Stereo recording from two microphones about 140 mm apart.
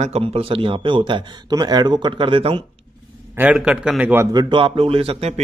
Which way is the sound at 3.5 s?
5° right (ahead or behind).